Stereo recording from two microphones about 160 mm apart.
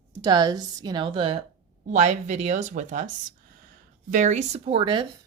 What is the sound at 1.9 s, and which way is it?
Speech, 45° right (ahead or behind).